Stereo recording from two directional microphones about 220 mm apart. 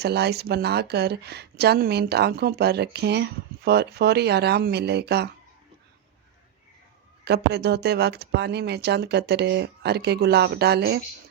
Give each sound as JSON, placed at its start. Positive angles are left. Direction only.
{"t": 0.0, "sound": "speech", "side_deg": -50}
{"t": 7.3, "sound": "speech", "side_deg": -50}